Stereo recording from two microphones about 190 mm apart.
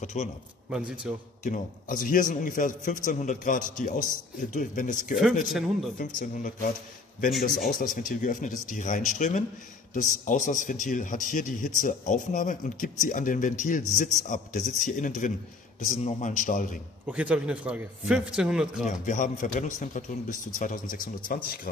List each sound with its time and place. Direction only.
0.0 s a man's voice: 40° left (ahead or behind)
0.7 s a man's voice: 5° right (ahead or behind)
1.4 s speech: 45° left (ahead or behind)
5.5 s a man's voice: centre (ahead or behind)
5.9 s speech: 45° left (ahead or behind)
7.8 s speech: 45° left (ahead or behind)
17.0 s a man's voice: 5° right (ahead or behind)
18.9 s speech: 40° left (ahead or behind)